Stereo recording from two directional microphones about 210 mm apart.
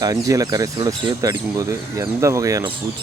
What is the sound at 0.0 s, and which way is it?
Speech, 15° right (ahead or behind).